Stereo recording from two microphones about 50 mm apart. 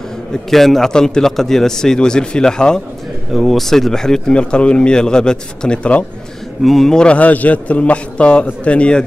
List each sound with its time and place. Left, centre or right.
0.3 s speech: centre
3.3 s speech: centre; by 6.0 s left
6.6 s speech: centre
7.1 s a man's voice: left